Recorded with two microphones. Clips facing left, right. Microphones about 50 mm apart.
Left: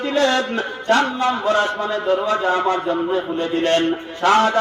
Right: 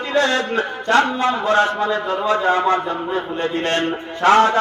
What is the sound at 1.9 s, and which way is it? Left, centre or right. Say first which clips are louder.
A man's voice: even; right.